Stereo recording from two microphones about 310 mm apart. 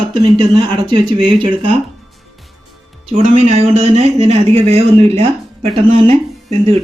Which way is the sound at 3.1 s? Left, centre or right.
Centre.